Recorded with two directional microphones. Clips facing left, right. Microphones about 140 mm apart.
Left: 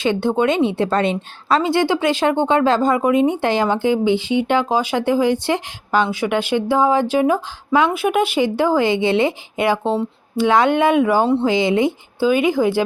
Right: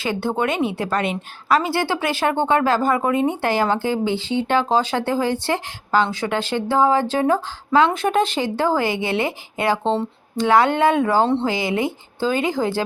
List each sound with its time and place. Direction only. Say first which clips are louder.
0.0 s speech: left 5 dB; 20° left (ahead or behind)